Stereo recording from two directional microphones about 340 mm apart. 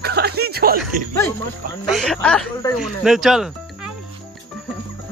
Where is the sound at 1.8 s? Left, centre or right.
Centre.